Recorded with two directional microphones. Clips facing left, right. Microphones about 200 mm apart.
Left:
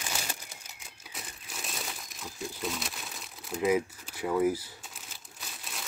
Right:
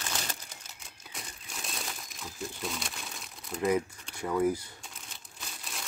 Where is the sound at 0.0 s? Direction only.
10° left (ahead or behind).